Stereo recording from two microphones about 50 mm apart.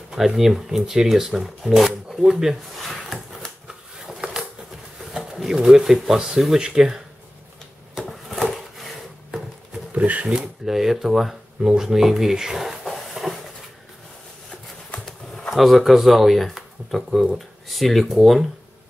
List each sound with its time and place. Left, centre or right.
0.1 s speech: centre
2.7 s drawer open or close: centre
3.6 s a sound: centre
5.1 s speech: centre
8.1 s a sound: centre
9.9 s speech: right
10.2 s speech: centre
15.0 s bee: centre
15.5 s speech: centre